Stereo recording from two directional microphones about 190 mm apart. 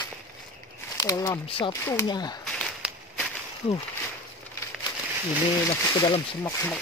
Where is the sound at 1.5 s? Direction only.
30° left (ahead or behind).